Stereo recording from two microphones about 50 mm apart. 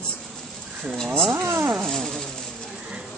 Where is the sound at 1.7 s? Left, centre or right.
Centre.